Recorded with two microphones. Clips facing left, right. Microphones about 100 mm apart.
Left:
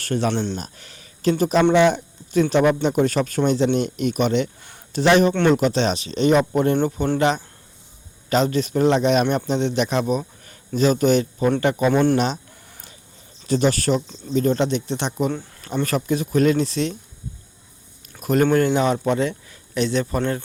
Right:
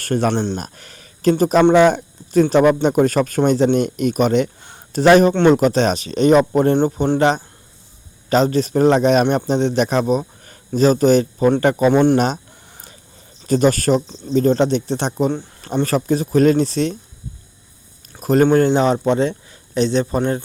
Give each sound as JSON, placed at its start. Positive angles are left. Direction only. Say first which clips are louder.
{"t": 0.0, "sound": "a man's voice", "louder": "right 4 dB", "side_deg": -50}
{"t": 11.9, "sound": "a man's voice", "louder": "right 4 dB", "side_deg": -25}
{"t": 12.1, "sound": "speech", "louder": "right 4 dB", "side_deg": -45}
{"t": 12.7, "sound": "a sound", "louder": "right 4 dB", "side_deg": -35}
{"t": 13.5, "sound": "a man's voice", "louder": "right 4 dB", "side_deg": -45}
{"t": 18.2, "sound": "a sound", "louder": "right 4 dB", "side_deg": -35}
{"t": 18.4, "sound": "a man's voice", "louder": "right 3 dB", "side_deg": -30}